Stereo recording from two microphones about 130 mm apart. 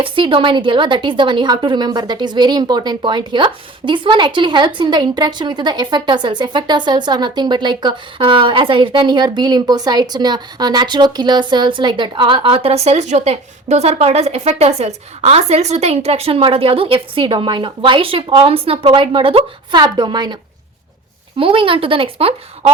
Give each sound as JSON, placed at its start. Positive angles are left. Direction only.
{"t": 0.0, "sound": "a woman's voice", "side_deg": -40}
{"t": 21.3, "sound": "speech", "side_deg": -45}